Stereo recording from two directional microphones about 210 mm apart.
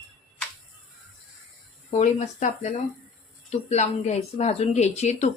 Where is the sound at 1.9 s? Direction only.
35° left (ahead or behind).